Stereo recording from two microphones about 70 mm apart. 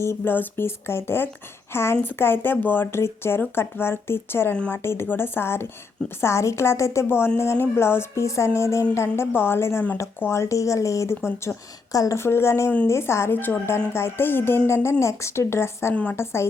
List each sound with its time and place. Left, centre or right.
0.0 s a woman's voice: left
2.8 s a woman's voice: left
11.9 s a woman's voice: left
12.2 s a woman's voice: left